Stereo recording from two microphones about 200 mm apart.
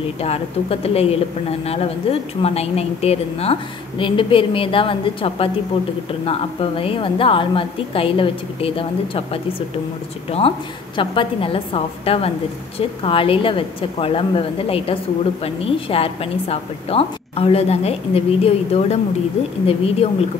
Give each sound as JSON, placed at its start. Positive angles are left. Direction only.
{"t": 0.2, "sound": "a woman's voice", "side_deg": 30}
{"t": 11.0, "sound": "a woman's voice", "side_deg": 25}